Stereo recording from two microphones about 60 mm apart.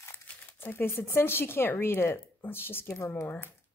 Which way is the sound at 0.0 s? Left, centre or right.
Left.